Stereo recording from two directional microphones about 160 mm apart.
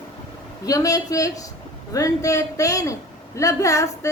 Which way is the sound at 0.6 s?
20° left (ahead or behind).